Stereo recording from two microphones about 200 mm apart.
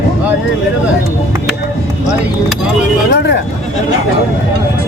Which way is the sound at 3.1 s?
60° left (ahead or behind).